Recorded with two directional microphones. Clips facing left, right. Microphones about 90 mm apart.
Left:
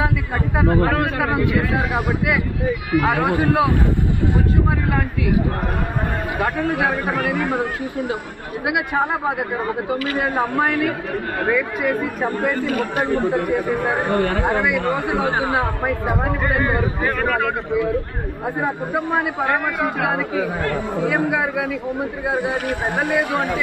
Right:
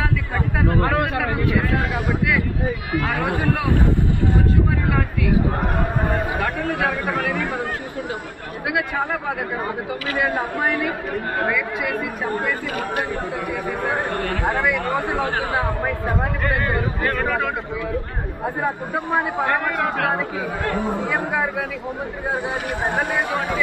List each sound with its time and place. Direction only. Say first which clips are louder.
1.2 s speech: left 3 dB; 15° left (ahead or behind)
3.0 s speech: left 5 dB; 20° left (ahead or behind)
8.6 s speech: left 2 dB; 20° left (ahead or behind)
14.1 s speech: left 4 dB; 20° left (ahead or behind)
19.1 s speech: right 1 dB; 5° left (ahead or behind)
22.9 s speech: left 4 dB; centre (ahead or behind)